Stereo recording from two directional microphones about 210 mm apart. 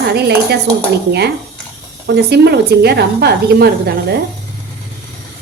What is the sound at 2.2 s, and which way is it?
A woman's voice, 50° right (ahead or behind).